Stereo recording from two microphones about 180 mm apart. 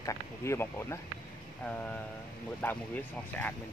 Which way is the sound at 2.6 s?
10° left (ahead or behind).